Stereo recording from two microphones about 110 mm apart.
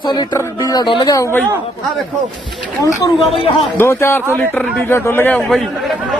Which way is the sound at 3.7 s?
25° left (ahead or behind).